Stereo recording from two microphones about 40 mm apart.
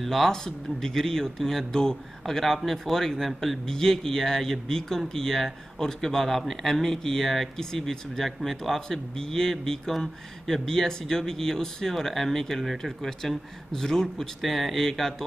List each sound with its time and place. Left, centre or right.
0.0 s speech: centre